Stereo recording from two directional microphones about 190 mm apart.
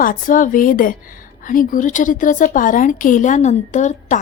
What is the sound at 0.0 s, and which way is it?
A woman's voice, 45° left (ahead or behind).